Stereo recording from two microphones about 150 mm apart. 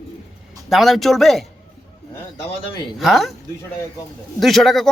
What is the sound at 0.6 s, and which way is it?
Speech, centre (ahead or behind).